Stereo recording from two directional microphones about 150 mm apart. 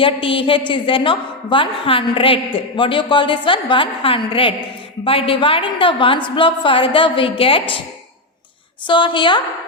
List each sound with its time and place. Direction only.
0.0 s a woman's voice: 35° left (ahead or behind)
8.9 s a woman's voice: 35° left (ahead or behind)